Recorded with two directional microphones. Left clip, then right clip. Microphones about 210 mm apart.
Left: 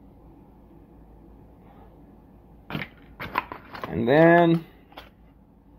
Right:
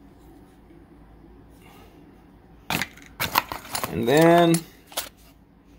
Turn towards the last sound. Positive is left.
turn(degrees=-60)  # may be behind; listen again after turning